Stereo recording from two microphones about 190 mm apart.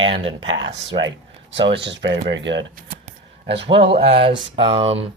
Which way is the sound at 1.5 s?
65° right (ahead or behind).